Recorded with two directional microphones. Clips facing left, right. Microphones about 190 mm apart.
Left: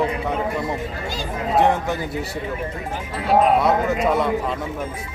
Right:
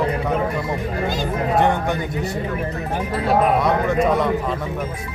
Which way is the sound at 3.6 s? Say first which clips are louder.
Right 1 dB; centre (ahead or behind).